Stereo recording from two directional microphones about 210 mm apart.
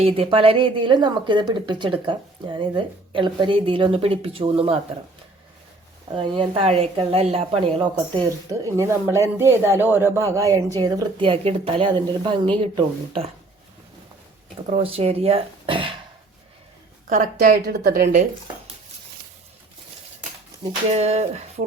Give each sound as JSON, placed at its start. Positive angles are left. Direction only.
{"t": 0.0, "sound": "speech", "side_deg": -25}
{"t": 6.1, "sound": "speech", "side_deg": -25}
{"t": 14.7, "sound": "speech", "side_deg": -25}
{"t": 17.1, "sound": "a woman's voice", "side_deg": -35}
{"t": 18.0, "sound": "a woman's voice", "side_deg": -35}
{"t": 20.9, "sound": "a woman's voice", "side_deg": -30}